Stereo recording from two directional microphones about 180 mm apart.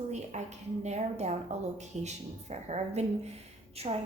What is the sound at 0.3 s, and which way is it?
A woman's voice, 40° right (ahead or behind).